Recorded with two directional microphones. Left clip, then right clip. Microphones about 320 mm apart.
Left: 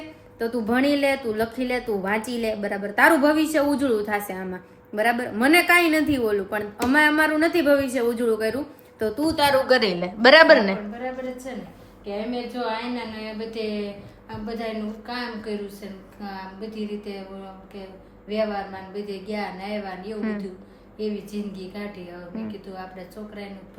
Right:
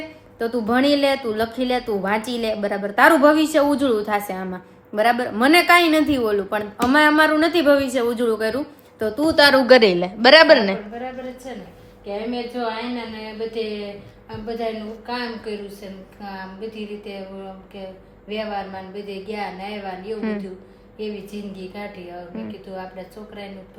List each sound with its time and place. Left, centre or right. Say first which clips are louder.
0.3 s a woman's voice: right 3 dB; centre
9.3 s a woman's voice: right 7 dB; centre
9.8 s a woman's voice: right 3 dB; centre
18.3 s a woman's voice: left 1 dB; centre